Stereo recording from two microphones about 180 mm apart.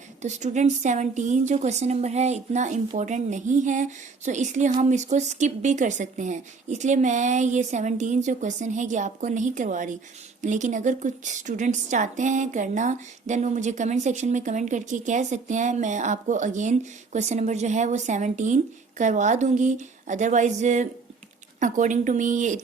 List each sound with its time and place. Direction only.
0.2 s a woman's voice: 40° right (ahead or behind)